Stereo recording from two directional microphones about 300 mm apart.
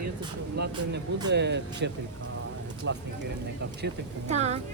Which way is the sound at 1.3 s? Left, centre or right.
Right.